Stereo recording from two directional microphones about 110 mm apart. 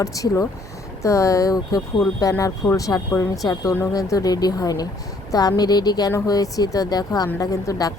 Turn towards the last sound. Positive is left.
turn(degrees=35)  # may be behind; listen again after turning